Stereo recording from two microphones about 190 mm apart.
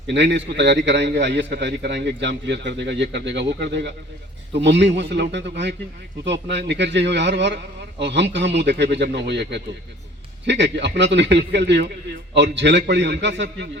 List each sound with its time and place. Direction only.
0.1 s a man's voice: 70° right (ahead or behind)